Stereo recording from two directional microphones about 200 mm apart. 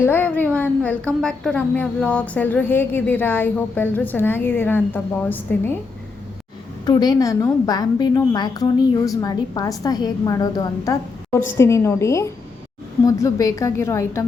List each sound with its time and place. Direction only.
0.0 s speech: 10° left (ahead or behind)
6.8 s speech: 20° left (ahead or behind)